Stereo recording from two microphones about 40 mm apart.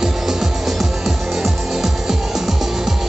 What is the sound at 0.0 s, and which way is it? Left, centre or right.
Music, centre.